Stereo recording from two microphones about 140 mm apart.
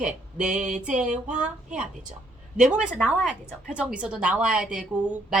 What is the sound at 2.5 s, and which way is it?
Speech, 65° right (ahead or behind).